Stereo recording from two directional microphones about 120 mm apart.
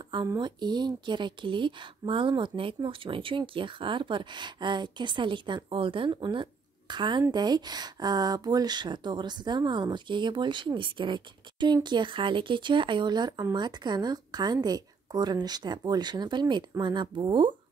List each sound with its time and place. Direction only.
0.4 s speech: 40° right (ahead or behind)